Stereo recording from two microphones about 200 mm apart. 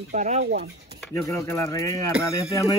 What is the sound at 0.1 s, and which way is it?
Speech, 35° right (ahead or behind).